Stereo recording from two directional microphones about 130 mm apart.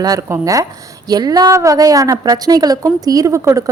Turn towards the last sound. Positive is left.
turn(degrees=-25)  # may be behind; listen again after turning